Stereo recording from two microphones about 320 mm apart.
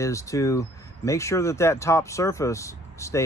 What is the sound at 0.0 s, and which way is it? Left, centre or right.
Speech, centre.